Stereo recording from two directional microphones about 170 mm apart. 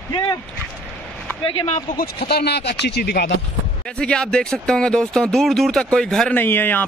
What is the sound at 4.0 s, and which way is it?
Speech, 5° left (ahead or behind).